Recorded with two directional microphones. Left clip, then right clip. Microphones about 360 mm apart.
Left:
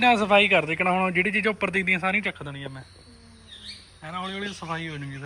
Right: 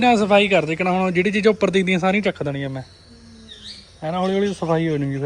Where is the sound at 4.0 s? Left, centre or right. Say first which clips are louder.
Right 12 dB; centre.